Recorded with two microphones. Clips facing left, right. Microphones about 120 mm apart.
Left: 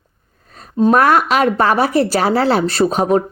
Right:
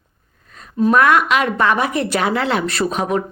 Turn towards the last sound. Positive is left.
turn(degrees=35)  # may be behind; listen again after turning